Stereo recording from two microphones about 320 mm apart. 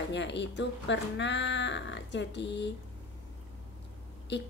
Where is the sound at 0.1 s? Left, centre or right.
Left.